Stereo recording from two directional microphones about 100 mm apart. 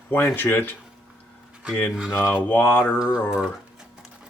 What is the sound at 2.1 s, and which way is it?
Mantra, 20° left (ahead or behind).